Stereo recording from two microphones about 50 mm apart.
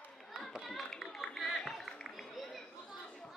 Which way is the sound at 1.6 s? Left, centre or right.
Centre.